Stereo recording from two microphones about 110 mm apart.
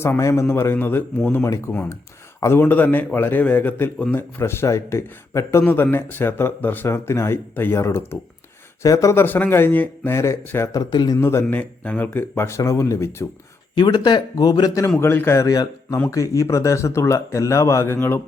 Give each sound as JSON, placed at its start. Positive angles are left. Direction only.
{"t": 0.0, "sound": "a man's voice", "side_deg": 25}
{"t": 9.2, "sound": "a man's voice", "side_deg": 20}
{"t": 10.8, "sound": "speech", "side_deg": 40}
{"t": 11.2, "sound": "a man's voice", "side_deg": 25}
{"t": 13.7, "sound": "a man's voice", "side_deg": 40}